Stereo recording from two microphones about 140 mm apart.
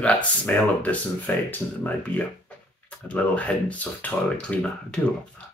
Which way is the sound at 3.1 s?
10° left (ahead or behind).